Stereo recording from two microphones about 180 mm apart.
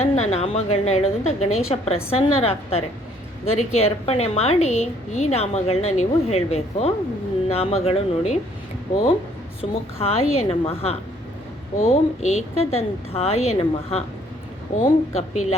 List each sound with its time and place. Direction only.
0.0 s a woman's voice: 35° left (ahead or behind)
9.6 s a woman's voice: 35° left (ahead or behind)